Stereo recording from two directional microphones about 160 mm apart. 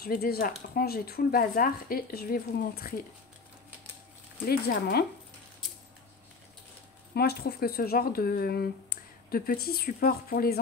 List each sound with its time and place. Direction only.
0.0 s speech: 75° left (ahead or behind)
4.5 s speech: 75° left (ahead or behind)
7.2 s speech: 80° left